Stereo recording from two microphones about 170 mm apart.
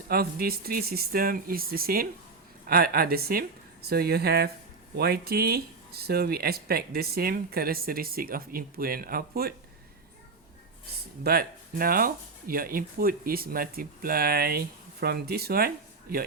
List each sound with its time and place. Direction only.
0.1 s speech: 65° right (ahead or behind)
11.2 s speech: 65° right (ahead or behind)